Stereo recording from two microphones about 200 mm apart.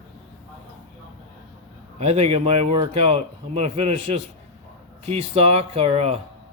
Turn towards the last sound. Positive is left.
turn(degrees=-30)  # may be behind; listen again after turning